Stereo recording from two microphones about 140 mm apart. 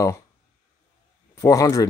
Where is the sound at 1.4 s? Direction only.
25° left (ahead or behind).